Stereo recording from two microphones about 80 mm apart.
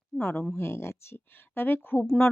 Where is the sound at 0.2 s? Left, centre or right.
Left.